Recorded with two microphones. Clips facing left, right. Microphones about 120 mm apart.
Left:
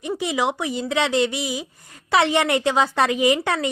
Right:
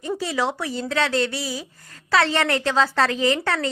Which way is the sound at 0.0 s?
15° left (ahead or behind).